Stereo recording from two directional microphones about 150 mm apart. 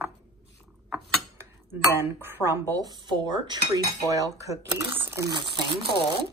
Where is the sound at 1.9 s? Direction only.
15° right (ahead or behind); by 6.0 s 35° right (ahead or behind).